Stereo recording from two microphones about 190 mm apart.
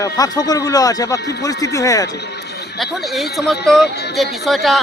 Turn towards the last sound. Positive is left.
turn(degrees=0)  # may be behind; listen again after turning